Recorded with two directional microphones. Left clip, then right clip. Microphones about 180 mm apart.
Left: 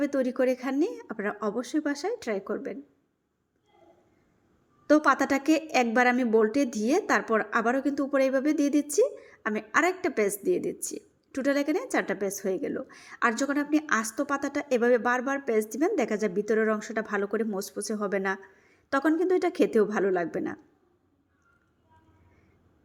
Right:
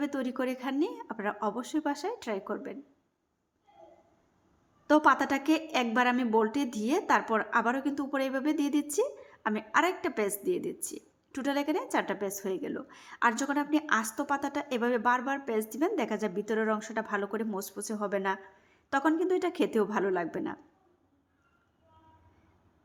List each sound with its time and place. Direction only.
0.0 s a woman's voice: 10° left (ahead or behind)
4.9 s a woman's voice: 10° left (ahead or behind)